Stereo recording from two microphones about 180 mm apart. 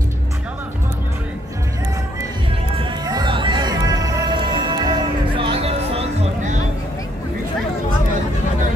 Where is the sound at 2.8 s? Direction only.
25° right (ahead or behind).